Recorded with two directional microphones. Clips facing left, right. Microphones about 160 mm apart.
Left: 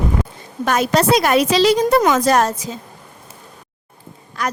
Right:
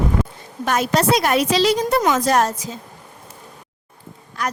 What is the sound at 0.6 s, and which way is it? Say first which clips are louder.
A woman's voice: left 2 dB; 90° left.